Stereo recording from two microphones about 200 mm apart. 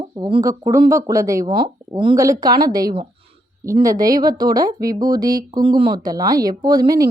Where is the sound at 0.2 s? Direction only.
20° right (ahead or behind).